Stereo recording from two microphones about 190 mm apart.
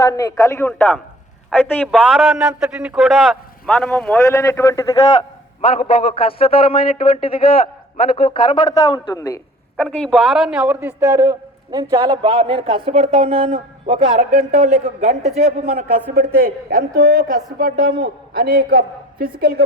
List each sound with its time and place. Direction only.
0.1 s a man's voice: 20° left (ahead or behind)
1.5 s a man's voice: 5° left (ahead or behind)
5.6 s a man's voice: 30° left (ahead or behind)
9.8 s a man's voice: 5° left (ahead or behind); by 15.2 s 40° right (ahead or behind)
16.1 s a woman's voice: 50° right (ahead or behind)